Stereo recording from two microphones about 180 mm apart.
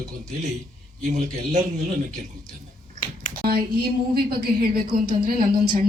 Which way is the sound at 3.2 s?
45° left (ahead or behind).